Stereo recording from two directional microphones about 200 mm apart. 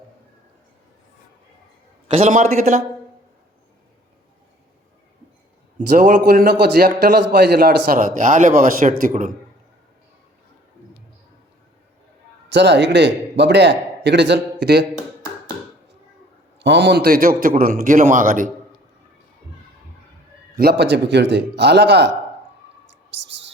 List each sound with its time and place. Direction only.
2.1 s a man's voice: 35° right (ahead or behind)
6.0 s a man's voice: 45° right (ahead or behind)
12.5 s a man's voice: 60° right (ahead or behind)
14.9 s tap: 20° left (ahead or behind)
16.6 s a man's voice: 65° right (ahead or behind); by 18.5 s 40° right (ahead or behind)
20.6 s a man's voice: 55° right (ahead or behind)